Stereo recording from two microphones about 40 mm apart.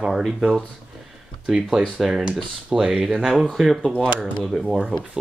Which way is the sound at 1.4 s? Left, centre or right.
Right.